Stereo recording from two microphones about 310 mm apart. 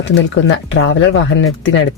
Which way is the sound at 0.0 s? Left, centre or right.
Left.